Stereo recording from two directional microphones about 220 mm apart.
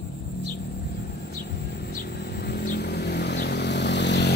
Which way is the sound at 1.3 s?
45° left (ahead or behind).